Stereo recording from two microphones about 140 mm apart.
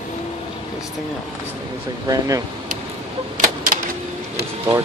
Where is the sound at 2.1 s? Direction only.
25° right (ahead or behind).